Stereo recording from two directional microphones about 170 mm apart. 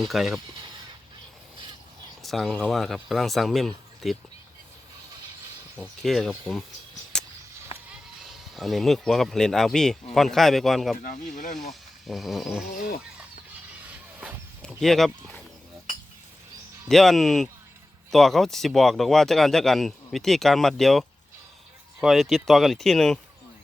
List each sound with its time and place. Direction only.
0.1 s speech: centre (ahead or behind)
2.2 s speech: centre (ahead or behind)
5.7 s speech: 5° left (ahead or behind)
7.1 s walk: 5° left (ahead or behind)
7.7 s music: 30° left (ahead or behind)
8.2 s speech: centre (ahead or behind)
12.7 s livestock: 60° left (ahead or behind)
13.1 s a sound: 10° right (ahead or behind)
14.6 s speech: centre (ahead or behind)
16.9 s speech: centre (ahead or behind)
22.0 s speech: centre (ahead or behind)